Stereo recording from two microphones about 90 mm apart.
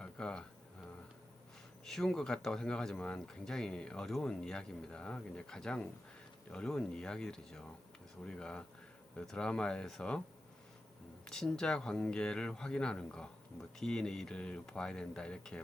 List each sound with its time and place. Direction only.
0.0 s a sound: 10° left (ahead or behind)
1.8 s speech: 5° left (ahead or behind)
11.3 s speech: 5° left (ahead or behind)